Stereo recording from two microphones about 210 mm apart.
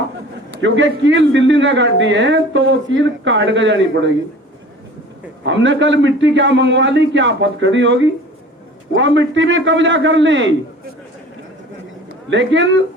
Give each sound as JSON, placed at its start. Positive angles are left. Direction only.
{"t": 0.5, "sound": "a man's voice", "side_deg": -60}
{"t": 5.5, "sound": "a man's voice", "side_deg": -60}
{"t": 12.3, "sound": "a man's voice", "side_deg": -60}